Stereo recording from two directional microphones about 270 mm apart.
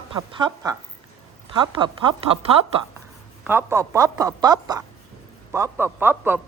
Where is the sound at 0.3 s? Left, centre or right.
Centre.